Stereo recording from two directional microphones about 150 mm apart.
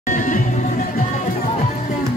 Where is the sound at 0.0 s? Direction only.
60° left (ahead or behind).